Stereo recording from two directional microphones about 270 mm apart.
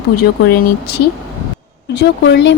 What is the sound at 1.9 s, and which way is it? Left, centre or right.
Speech, left.